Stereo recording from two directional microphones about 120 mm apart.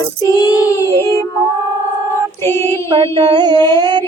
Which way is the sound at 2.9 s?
45° right (ahead or behind).